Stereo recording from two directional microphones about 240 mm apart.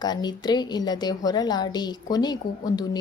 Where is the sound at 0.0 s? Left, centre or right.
Centre.